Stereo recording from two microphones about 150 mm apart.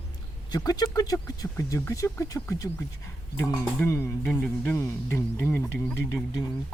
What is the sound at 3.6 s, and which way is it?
Music, 15° left (ahead or behind).